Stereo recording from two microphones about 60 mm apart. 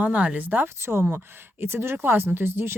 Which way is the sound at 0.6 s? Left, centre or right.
Right.